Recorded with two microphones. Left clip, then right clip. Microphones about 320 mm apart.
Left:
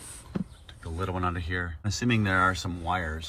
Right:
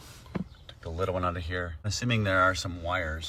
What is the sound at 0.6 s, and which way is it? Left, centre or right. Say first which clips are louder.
Speech: right 5 dB; centre.